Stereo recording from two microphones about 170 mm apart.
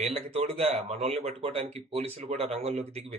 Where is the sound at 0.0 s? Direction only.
35° right (ahead or behind).